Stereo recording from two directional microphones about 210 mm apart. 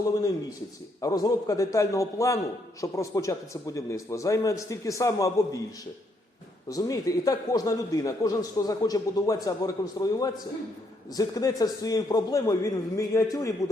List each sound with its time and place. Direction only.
1.0 s a man's voice: 15° left (ahead or behind)
6.7 s a man's voice: 15° left (ahead or behind)